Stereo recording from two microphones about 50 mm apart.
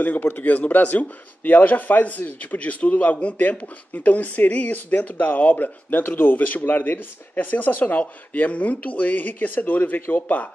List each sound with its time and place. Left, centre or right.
0.0 s speech: left